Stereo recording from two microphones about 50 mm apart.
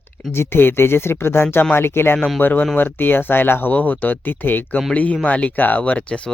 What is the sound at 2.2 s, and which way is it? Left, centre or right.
Speech, centre.